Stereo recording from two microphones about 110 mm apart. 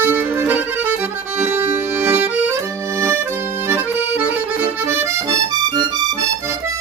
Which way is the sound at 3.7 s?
20° right (ahead or behind).